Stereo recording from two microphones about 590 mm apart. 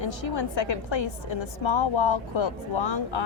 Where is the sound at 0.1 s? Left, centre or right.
Left.